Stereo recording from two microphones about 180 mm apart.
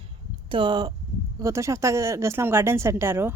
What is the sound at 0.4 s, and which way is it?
A woman's voice, 30° right (ahead or behind).